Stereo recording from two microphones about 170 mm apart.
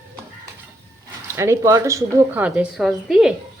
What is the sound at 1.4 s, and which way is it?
A woman's voice, 15° right (ahead or behind).